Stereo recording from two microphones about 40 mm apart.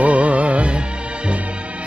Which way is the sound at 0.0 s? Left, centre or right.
Right.